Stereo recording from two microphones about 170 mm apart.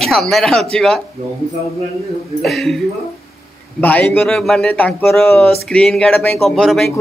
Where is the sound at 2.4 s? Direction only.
Centre (ahead or behind).